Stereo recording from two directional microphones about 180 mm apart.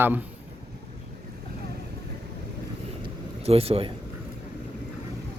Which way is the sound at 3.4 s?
35° right (ahead or behind).